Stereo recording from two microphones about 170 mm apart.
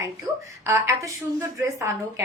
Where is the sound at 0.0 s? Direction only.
15° right (ahead or behind).